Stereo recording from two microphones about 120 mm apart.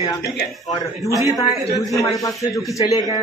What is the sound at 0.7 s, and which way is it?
A man's voice, 30° left (ahead or behind).